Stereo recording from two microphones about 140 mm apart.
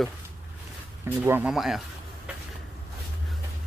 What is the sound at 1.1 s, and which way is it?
Speech, 10° right (ahead or behind).